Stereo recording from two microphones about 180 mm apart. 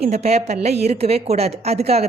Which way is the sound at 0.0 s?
35° right (ahead or behind).